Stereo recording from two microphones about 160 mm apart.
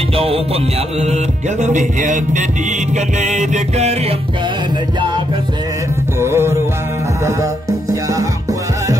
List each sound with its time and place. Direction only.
0.1 s music: 35° right (ahead or behind)
6.1 s music: 15° right (ahead or behind)
7.9 s music: 20° right (ahead or behind)